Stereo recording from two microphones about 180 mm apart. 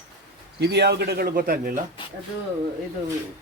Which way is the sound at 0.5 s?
70° right (ahead or behind).